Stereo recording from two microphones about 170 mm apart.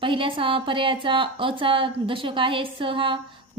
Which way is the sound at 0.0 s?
30° right (ahead or behind).